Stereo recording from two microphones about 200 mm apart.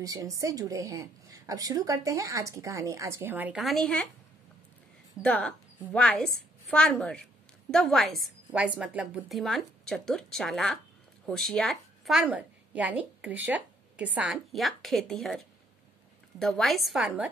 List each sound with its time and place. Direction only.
0.0 s a woman's voice: 15° right (ahead or behind); by 4.1 s 5° left (ahead or behind)
5.2 s a woman's voice: 5° left (ahead or behind)